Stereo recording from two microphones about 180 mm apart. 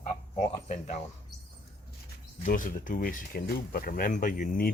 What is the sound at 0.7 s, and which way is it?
Speech, 40° left (ahead or behind).